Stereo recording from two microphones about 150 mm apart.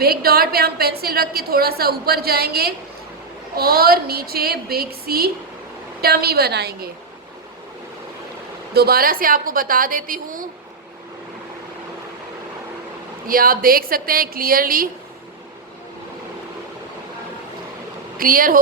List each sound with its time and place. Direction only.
0.0 s a woman's voice: 90° right
8.7 s a woman's voice: 90° right; by 10.4 s 65° right (ahead or behind)
13.2 s a woman's voice: 75° right (ahead or behind)
18.2 s a woman's voice: 70° right (ahead or behind)